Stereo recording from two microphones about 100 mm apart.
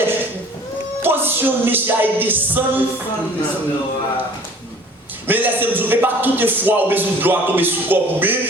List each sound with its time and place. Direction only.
0.0 s a sound: 20° right (ahead or behind)
1.0 s a man's voice: 20° right (ahead or behind)
5.3 s a man's voice: 20° right (ahead or behind)